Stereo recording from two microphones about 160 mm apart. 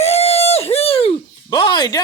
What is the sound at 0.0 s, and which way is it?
Speech, 40° left (ahead or behind).